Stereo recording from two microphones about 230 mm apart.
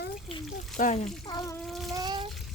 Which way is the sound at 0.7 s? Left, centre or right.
Left.